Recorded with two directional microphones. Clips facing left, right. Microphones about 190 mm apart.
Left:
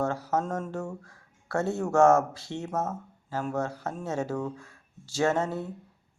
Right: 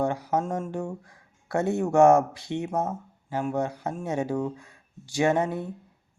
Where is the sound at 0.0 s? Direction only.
15° right (ahead or behind).